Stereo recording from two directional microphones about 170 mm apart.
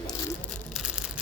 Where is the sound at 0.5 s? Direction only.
5° right (ahead or behind).